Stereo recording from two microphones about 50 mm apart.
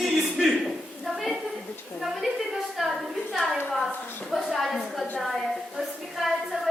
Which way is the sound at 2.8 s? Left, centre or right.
Centre.